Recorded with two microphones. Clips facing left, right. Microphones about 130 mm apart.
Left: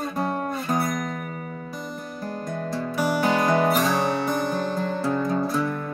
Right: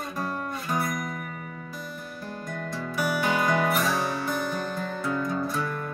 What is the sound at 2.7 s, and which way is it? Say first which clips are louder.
Music: left 4 dB; 40° left (ahead or behind).